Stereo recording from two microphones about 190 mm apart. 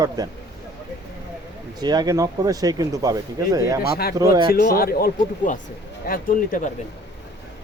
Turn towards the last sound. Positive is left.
turn(degrees=45)  # may be behind; listen again after turning